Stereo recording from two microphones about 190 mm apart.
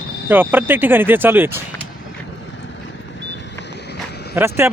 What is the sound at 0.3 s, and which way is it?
Speech, 10° right (ahead or behind).